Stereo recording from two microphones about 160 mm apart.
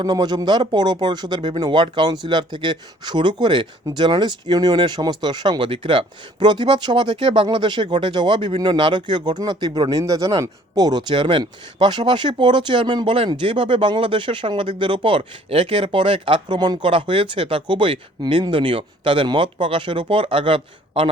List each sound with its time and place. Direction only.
0.0 s speech: 25° right (ahead or behind)